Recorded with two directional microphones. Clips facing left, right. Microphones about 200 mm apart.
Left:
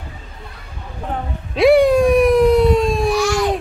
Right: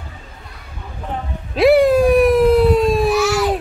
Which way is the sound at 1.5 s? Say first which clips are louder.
Even; centre (ahead or behind).